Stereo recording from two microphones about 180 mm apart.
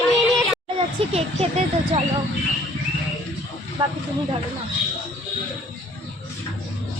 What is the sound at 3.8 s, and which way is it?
Speech, 25° right (ahead or behind).